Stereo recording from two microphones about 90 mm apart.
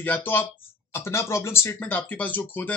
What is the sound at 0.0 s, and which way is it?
Speech, 20° left (ahead or behind).